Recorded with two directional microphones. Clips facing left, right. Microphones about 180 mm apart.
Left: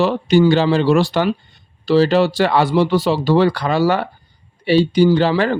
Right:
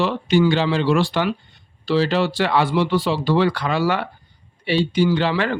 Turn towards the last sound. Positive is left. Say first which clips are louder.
# left 5 dB
turn(degrees=40)  # may be behind; listen again after turning